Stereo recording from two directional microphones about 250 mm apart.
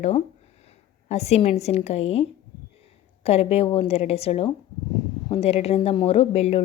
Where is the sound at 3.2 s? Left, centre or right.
Left.